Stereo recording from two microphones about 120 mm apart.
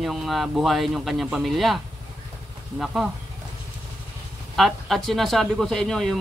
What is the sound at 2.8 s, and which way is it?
Speech, 5° right (ahead or behind).